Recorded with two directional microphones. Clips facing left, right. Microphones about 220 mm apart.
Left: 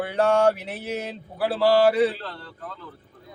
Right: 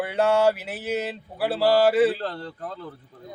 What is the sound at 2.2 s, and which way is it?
Speech, 40° right (ahead or behind).